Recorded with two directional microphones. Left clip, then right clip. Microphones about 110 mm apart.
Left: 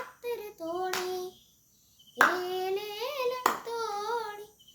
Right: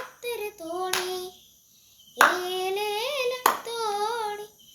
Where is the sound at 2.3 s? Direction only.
30° left (ahead or behind).